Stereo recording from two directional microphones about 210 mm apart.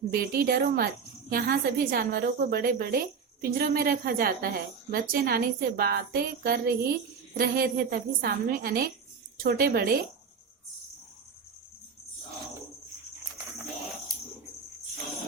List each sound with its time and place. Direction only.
0.1 s a woman's voice: 45° right (ahead or behind)